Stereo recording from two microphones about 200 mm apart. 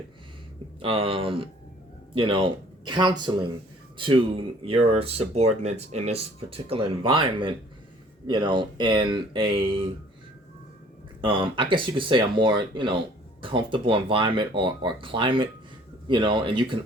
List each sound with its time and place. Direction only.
0.8 s speech: 25° right (ahead or behind)
11.2 s speech: 25° right (ahead or behind)